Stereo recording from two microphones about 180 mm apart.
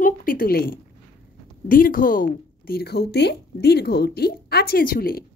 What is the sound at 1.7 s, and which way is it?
A woman's voice, 50° left (ahead or behind).